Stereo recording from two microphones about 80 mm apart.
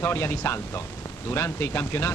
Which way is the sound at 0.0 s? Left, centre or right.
Left.